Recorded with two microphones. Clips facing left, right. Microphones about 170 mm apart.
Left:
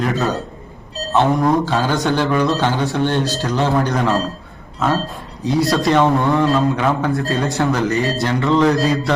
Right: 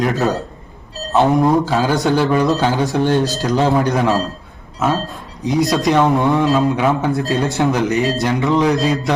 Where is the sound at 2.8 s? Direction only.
40° right (ahead or behind).